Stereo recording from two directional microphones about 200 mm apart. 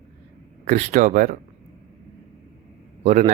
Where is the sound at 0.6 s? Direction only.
35° right (ahead or behind).